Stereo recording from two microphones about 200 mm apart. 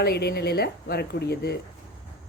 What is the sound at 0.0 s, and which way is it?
Speech, 55° left (ahead or behind).